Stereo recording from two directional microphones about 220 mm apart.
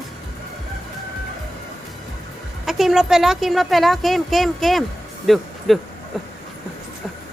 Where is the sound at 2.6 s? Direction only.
Centre (ahead or behind).